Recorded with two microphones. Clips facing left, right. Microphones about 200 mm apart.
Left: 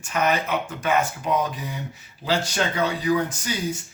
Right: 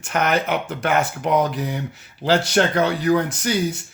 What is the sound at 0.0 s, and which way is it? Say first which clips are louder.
Speech: right 2 dB; 70° right (ahead or behind).